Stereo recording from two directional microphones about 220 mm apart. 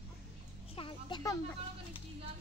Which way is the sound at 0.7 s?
20° left (ahead or behind).